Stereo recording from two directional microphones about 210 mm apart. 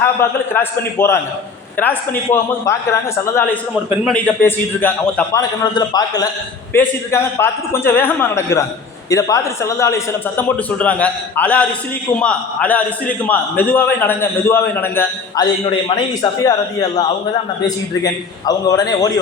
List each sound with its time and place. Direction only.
0.2 s a man's voice: 10° left (ahead or behind)